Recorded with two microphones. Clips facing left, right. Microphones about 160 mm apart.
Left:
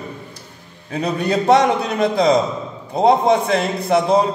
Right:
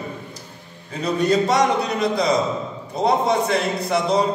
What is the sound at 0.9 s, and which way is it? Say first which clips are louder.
A man's voice: even; 60° left (ahead or behind).